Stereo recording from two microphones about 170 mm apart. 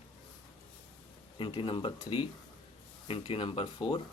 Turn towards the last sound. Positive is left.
turn(degrees=25)  # may be behind; listen again after turning